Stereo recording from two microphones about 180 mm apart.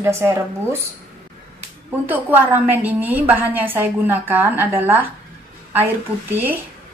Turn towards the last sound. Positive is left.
turn(degrees=-10)  # may be behind; listen again after turning